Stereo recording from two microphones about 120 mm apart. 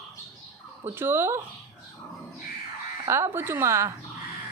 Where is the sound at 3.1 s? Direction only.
20° right (ahead or behind).